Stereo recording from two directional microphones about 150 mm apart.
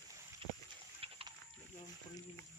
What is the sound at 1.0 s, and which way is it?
Pig, 40° right (ahead or behind).